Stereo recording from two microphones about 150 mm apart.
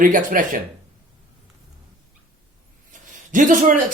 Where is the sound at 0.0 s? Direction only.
60° right (ahead or behind).